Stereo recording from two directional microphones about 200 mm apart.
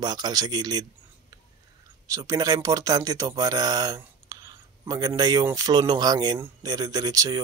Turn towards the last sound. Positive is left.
turn(degrees=-20)  # may be behind; listen again after turning